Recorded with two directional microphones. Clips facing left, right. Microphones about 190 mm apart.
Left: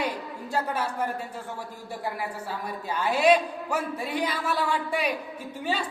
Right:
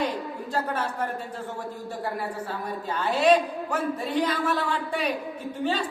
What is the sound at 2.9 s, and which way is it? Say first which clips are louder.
A man's voice: right 1 dB; 10° left (ahead or behind).